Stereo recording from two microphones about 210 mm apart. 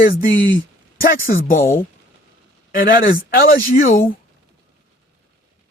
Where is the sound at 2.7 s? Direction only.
45° left (ahead or behind).